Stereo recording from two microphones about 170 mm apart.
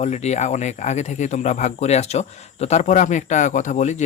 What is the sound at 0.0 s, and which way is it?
Speech, 40° left (ahead or behind).